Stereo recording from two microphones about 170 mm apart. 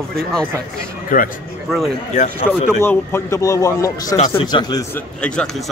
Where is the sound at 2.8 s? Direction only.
15° left (ahead or behind).